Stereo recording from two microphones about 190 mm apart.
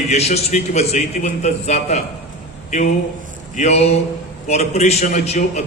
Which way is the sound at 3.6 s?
35° left (ahead or behind).